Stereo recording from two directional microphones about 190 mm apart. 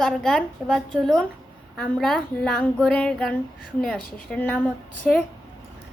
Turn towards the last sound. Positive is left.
turn(degrees=5)  # may be behind; listen again after turning